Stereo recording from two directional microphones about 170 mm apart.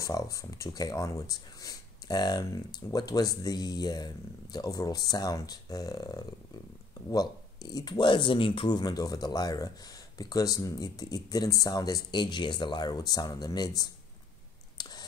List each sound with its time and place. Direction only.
0.0 s speech: 20° left (ahead or behind)
14.8 s whispering: 25° left (ahead or behind)